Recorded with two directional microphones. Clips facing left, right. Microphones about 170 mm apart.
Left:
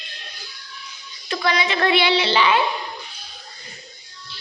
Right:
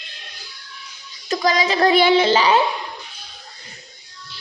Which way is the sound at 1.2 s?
40° right (ahead or behind).